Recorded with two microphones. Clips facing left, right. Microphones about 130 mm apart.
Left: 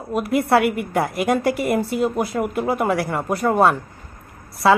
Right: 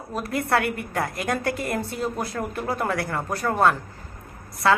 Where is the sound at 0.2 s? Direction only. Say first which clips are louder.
Left 6 dB; 25° left (ahead or behind).